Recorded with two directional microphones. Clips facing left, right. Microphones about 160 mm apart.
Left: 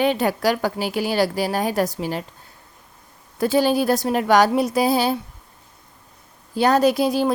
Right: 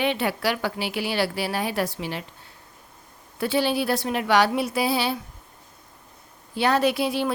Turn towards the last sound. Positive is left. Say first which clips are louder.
# left 5 dB
turn(degrees=40)  # may be behind; listen again after turning